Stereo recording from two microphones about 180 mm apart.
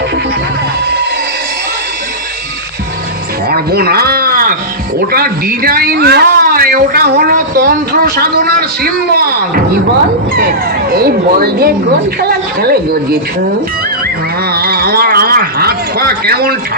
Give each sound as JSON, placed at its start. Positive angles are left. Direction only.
{"t": 3.5, "sound": "a sound", "side_deg": -60}
{"t": 4.9, "sound": "a man's voice", "side_deg": -55}
{"t": 10.3, "sound": "a man's voice", "side_deg": -55}
{"t": 14.5, "sound": "speech", "side_deg": -60}